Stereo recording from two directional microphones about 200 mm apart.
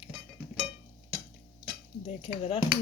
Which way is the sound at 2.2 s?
30° left (ahead or behind).